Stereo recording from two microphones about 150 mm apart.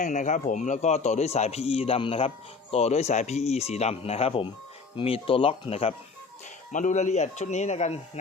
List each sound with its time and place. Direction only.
0.0 s a man's voice: 55° left (ahead or behind); by 5.9 s 40° left (ahead or behind)
6.7 s a man's voice: 55° left (ahead or behind)